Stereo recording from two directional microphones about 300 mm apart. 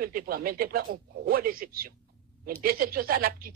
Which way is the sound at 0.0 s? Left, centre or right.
Right.